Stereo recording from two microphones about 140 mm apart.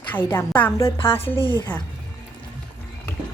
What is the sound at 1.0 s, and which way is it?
Speech, 40° left (ahead or behind).